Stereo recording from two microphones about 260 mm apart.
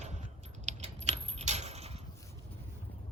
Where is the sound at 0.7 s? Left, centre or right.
Right.